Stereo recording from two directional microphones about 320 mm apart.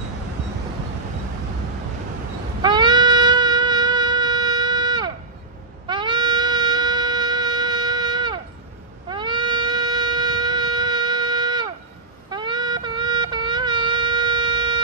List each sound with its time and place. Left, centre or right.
2.6 s music: centre
9.1 s wind instrument: centre
12.3 s music: centre